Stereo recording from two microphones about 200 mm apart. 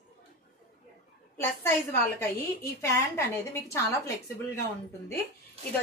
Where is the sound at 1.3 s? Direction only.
10° left (ahead or behind).